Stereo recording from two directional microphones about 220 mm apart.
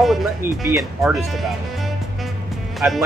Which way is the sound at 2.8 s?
10° right (ahead or behind).